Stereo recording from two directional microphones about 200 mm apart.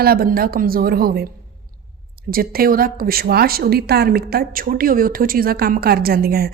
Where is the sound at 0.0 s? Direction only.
50° right (ahead or behind).